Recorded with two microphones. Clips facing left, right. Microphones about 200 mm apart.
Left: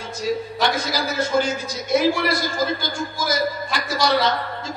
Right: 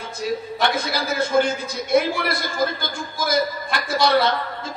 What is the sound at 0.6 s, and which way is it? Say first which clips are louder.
A man's voice: even; 60° right (ahead or behind).